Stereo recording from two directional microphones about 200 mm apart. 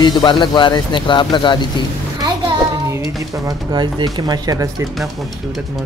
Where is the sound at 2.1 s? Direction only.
20° right (ahead or behind).